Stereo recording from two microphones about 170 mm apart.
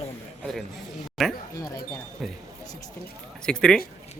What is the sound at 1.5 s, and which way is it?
Speech, 20° left (ahead or behind).